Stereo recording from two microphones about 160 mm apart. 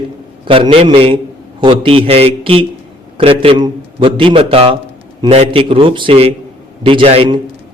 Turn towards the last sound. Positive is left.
turn(degrees=-35)  # may be behind; listen again after turning